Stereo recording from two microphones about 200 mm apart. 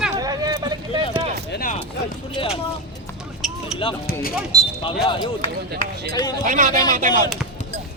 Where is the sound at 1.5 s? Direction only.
50° left (ahead or behind).